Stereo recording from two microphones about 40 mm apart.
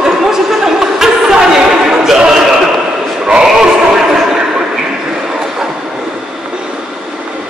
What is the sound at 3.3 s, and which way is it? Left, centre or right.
Music, centre.